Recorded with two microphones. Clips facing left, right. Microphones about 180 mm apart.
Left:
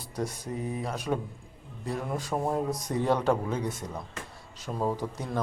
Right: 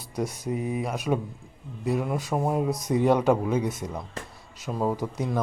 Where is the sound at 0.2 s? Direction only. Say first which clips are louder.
Right 4 dB; 10° right (ahead or behind).